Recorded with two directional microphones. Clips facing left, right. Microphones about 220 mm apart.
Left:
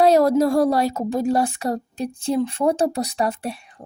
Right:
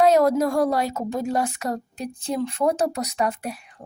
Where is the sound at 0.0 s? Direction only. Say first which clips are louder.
Left 2 dB; 35° left (ahead or behind).